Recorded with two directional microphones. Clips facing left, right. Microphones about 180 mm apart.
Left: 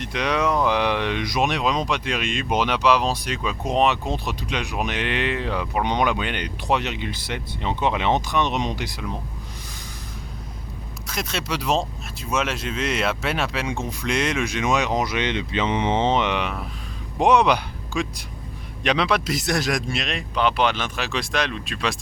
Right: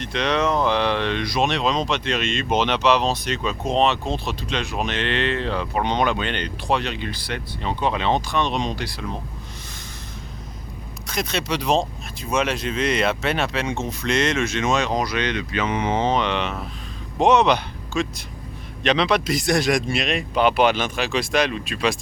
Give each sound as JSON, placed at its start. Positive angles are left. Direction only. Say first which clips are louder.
{"t": 0.0, "sound": "speech", "louder": "right 1 dB", "side_deg": 10}
{"t": 11.0, "sound": "speech", "louder": "right 3 dB", "side_deg": 0}